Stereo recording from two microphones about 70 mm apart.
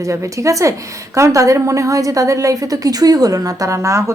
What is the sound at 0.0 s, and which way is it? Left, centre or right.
A woman's voice, right.